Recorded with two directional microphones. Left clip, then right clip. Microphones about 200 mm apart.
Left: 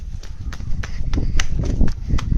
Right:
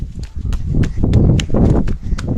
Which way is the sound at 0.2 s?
35° right (ahead or behind).